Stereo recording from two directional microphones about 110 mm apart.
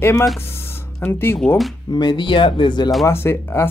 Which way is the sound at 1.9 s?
45° left (ahead or behind).